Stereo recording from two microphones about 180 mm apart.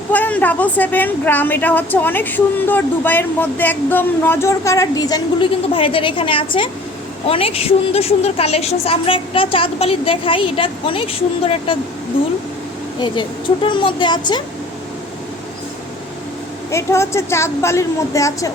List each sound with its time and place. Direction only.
0.1 s a woman's voice: 10° left (ahead or behind); by 11.8 s 30° left (ahead or behind)
13.0 s speech: 25° left (ahead or behind)
16.7 s a woman's voice: 15° left (ahead or behind)